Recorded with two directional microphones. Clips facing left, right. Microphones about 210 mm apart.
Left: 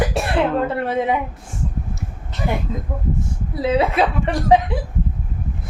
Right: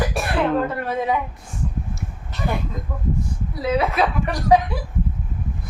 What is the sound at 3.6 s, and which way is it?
A woman's voice, 25° left (ahead or behind).